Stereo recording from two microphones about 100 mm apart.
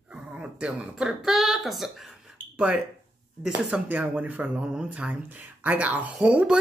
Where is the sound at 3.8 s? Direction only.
15° right (ahead or behind).